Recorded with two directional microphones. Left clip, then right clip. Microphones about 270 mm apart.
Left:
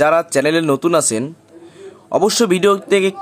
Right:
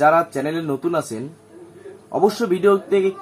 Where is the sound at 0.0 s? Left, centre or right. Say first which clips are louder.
Left 3 dB; left.